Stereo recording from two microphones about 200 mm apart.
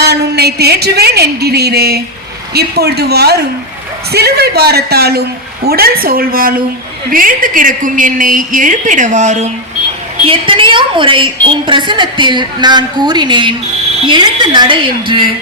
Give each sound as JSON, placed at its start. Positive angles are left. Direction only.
{"t": 0.0, "sound": "a man's voice", "side_deg": -55}